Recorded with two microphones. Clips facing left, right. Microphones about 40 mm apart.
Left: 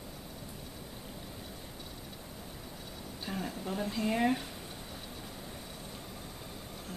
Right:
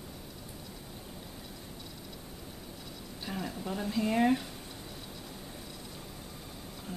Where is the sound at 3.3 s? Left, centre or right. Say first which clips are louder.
Right 1 dB; centre.